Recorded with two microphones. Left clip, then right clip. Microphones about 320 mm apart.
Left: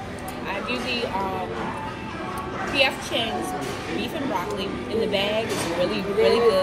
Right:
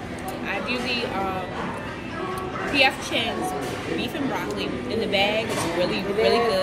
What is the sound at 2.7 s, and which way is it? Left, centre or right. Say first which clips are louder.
Speech: right 1 dB; centre.